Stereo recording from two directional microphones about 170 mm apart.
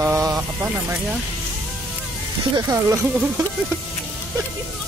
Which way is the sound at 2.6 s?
20° right (ahead or behind).